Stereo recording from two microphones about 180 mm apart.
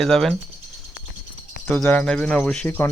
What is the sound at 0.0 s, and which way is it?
Speech, centre (ahead or behind).